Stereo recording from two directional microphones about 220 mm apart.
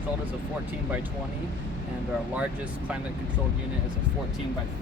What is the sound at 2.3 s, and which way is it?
Speech, 5° right (ahead or behind).